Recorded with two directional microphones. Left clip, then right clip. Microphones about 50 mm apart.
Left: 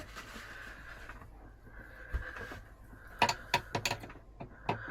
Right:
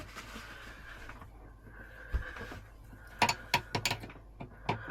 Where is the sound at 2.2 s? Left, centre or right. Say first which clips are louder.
Even; centre.